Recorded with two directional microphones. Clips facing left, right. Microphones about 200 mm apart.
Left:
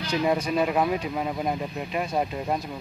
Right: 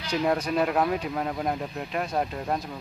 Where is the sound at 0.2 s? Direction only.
5° left (ahead or behind).